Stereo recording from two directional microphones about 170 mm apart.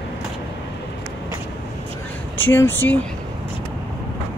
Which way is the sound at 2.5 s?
15° left (ahead or behind).